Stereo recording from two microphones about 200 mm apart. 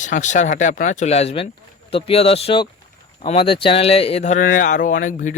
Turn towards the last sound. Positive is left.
turn(degrees=40)  # may be behind; listen again after turning